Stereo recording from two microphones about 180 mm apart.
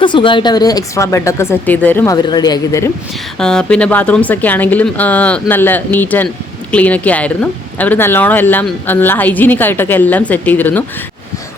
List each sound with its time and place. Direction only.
0.0 s speech: 25° left (ahead or behind); by 2.1 s 10° left (ahead or behind)
2.2 s speech: 20° left (ahead or behind)
3.3 s speech: 5° left (ahead or behind)